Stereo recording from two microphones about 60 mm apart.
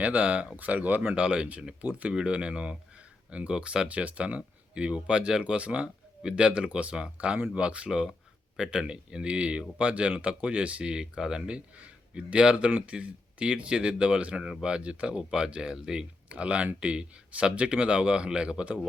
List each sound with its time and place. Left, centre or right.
0.0 s speech: right
2.1 s speech: centre